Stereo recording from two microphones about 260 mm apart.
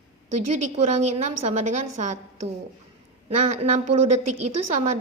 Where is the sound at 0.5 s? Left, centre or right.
Right.